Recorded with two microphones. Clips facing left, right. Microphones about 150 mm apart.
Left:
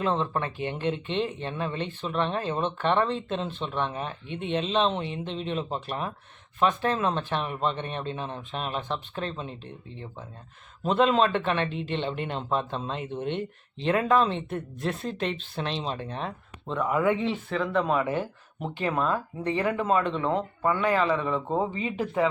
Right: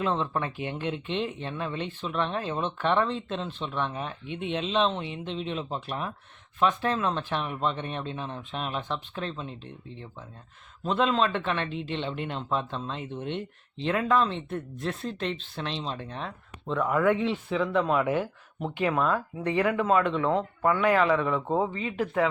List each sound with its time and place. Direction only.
0.0 s speech: centre (ahead or behind)